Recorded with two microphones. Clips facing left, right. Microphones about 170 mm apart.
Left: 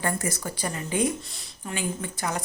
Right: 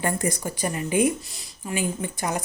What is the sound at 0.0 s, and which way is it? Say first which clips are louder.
Speech: right 3 dB; 15° right (ahead or behind).